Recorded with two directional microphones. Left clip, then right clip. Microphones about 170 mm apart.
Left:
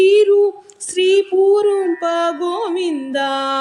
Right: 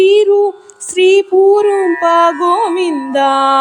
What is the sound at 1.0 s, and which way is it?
Music, 30° right (ahead or behind).